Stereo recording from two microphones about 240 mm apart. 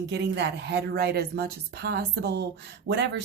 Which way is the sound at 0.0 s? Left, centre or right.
Right.